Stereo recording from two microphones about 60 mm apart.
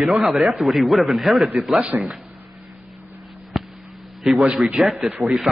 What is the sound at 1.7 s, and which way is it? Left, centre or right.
Speech, right.